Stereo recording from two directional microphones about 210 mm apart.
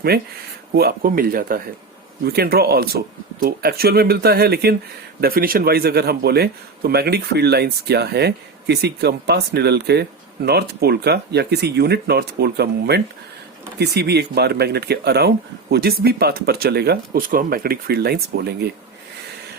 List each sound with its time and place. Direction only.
0.1 s speech: 50° right (ahead or behind)